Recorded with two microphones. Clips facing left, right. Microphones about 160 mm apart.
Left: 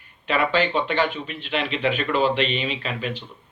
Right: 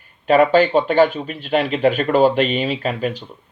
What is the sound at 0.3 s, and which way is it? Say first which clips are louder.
A man's voice: right 9 dB; 45° right (ahead or behind).